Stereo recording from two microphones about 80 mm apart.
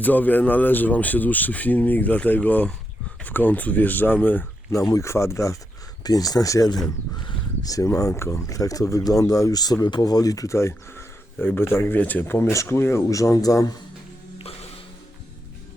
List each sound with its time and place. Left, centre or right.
0.0 s speech: left
4.9 s speech: left
6.0 s speech: left
12.4 s speech: left